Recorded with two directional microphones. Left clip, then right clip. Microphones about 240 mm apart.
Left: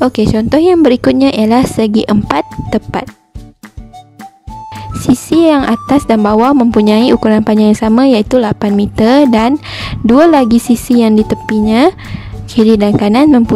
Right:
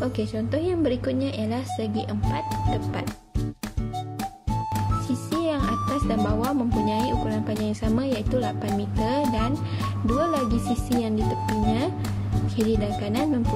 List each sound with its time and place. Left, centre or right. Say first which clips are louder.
0.0 s speech: left 16 dB; left
5.3 s speech: left 16 dB; left